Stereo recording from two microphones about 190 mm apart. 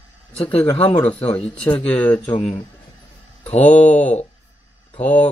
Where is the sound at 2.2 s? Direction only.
35° left (ahead or behind).